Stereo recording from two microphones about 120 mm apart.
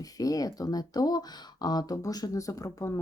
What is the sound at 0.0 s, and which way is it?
Speech, 30° left (ahead or behind).